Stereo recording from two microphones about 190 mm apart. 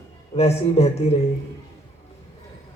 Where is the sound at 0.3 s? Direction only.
35° left (ahead or behind).